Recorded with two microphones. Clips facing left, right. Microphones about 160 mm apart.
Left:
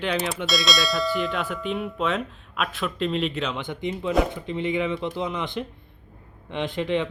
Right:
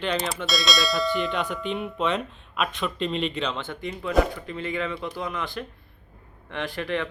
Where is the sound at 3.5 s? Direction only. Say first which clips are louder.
Left 3 dB; 15° left (ahead or behind).